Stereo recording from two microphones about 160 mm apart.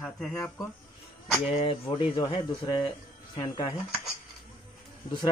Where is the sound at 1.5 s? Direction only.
35° left (ahead or behind).